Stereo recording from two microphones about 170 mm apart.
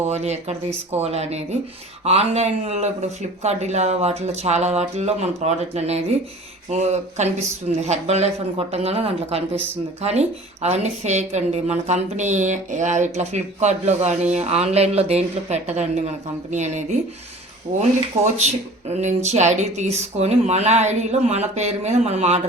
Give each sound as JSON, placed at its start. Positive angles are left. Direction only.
{"t": 0.0, "sound": "speech", "side_deg": -40}